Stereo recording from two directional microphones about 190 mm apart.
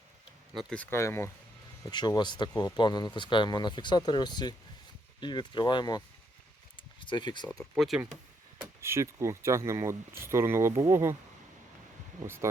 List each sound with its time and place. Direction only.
0.5 s speech: 5° left (ahead or behind); by 6.0 s 20° left (ahead or behind)
6.7 s a sound: 25° left (ahead or behind)
7.4 s speech: centre (ahead or behind)
8.8 s speech: 15° right (ahead or behind)
12.2 s speech: 15° right (ahead or behind)